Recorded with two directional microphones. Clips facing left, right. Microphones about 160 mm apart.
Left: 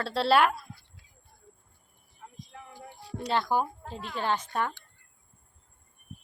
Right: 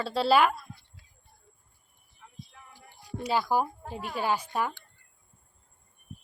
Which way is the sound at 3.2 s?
5° right (ahead or behind).